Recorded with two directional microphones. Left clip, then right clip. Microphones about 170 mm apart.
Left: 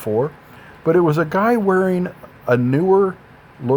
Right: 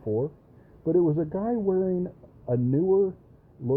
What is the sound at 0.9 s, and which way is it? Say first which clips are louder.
Speech: left 8 dB; 85° left.